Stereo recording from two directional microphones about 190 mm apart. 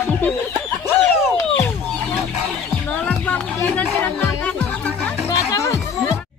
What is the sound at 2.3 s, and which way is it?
Music, 5° right (ahead or behind).